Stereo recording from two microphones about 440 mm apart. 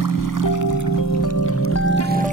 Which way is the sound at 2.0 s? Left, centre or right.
Centre.